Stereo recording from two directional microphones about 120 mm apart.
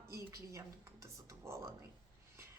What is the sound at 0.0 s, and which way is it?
A woman's voice, 25° right (ahead or behind).